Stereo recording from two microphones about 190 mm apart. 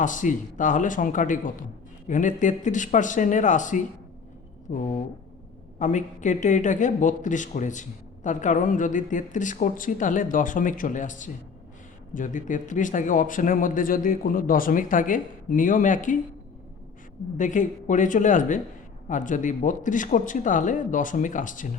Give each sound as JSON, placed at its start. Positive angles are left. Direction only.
{"t": 0.0, "sound": "speech", "side_deg": 40}
{"t": 17.3, "sound": "speech", "side_deg": 40}